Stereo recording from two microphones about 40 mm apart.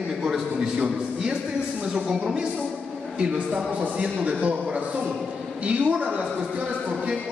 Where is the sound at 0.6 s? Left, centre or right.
Centre.